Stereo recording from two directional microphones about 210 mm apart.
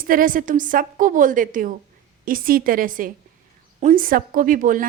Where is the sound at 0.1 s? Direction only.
40° right (ahead or behind).